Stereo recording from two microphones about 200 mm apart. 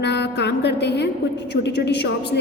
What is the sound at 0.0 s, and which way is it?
A woman's voice, 60° left (ahead or behind).